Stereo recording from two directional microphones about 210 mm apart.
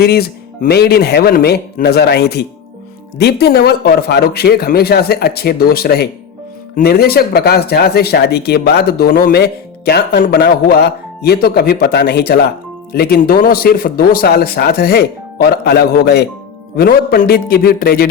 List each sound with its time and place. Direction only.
0.0 s speech: 50° left (ahead or behind)